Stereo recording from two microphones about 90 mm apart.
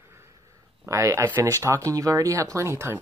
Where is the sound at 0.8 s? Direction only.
35° right (ahead or behind).